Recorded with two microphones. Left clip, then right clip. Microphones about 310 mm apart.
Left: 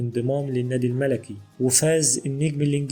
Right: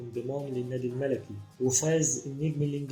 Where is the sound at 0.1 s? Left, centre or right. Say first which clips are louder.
Left 8 dB; left.